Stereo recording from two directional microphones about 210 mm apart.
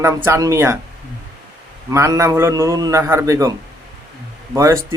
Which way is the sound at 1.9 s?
15° right (ahead or behind).